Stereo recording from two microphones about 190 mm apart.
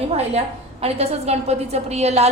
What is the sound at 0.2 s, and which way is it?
A woman's voice, 35° right (ahead or behind).